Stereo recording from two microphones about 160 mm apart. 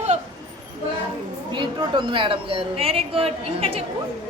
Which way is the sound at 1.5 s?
30° right (ahead or behind).